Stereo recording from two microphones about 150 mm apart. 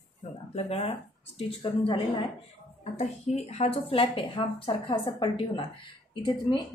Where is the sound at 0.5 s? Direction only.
40° left (ahead or behind).